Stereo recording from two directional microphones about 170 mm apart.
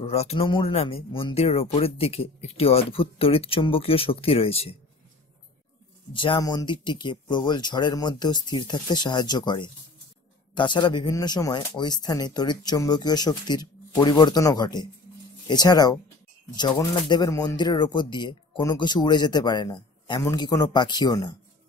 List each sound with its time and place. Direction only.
0.0 s speech: 40° left (ahead or behind)
6.1 s speech: 30° left (ahead or behind)